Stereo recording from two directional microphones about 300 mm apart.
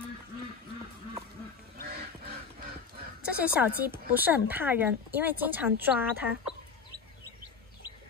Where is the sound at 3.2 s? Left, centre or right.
Centre.